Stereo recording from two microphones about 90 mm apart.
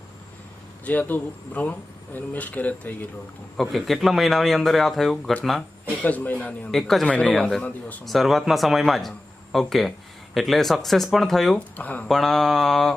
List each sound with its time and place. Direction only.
0.9 s speech: 20° left (ahead or behind)
3.6 s speech: centre (ahead or behind)
6.0 s speech: 20° left (ahead or behind)
6.7 s speech: centre (ahead or behind)
11.8 s speech: 20° left (ahead or behind)
12.0 s speech: 5° left (ahead or behind)